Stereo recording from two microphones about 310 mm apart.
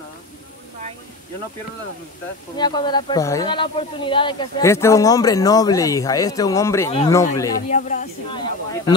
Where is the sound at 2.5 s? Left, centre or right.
Centre.